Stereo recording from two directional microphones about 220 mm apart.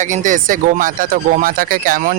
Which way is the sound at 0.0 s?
35° right (ahead or behind).